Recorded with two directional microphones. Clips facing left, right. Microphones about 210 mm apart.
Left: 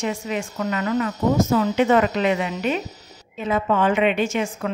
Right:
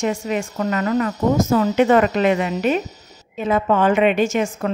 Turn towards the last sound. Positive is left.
turn(degrees=-45)  # may be behind; listen again after turning